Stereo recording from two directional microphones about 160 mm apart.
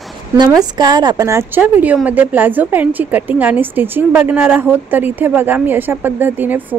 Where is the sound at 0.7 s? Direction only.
25° right (ahead or behind).